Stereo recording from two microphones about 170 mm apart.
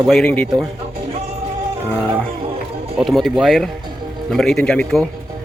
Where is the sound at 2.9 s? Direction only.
Centre (ahead or behind).